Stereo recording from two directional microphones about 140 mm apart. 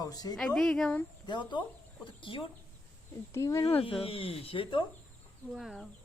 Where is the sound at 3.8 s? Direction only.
40° left (ahead or behind).